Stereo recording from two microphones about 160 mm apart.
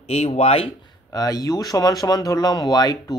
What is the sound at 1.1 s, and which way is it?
Speech, 20° left (ahead or behind).